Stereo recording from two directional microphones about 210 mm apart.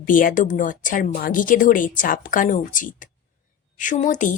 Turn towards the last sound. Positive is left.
turn(degrees=35)  # may be behind; listen again after turning